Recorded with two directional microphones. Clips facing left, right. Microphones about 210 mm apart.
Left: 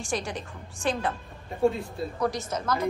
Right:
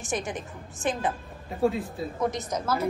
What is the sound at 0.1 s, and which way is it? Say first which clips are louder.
A woman's voice: right 1 dB; 20° right (ahead or behind).